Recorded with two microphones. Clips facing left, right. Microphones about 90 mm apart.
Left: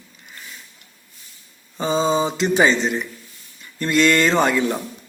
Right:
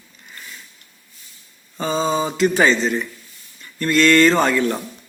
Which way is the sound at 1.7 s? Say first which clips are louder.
Left 1 dB; 15° left (ahead or behind).